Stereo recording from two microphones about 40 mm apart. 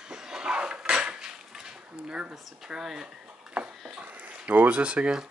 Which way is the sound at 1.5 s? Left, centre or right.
Centre.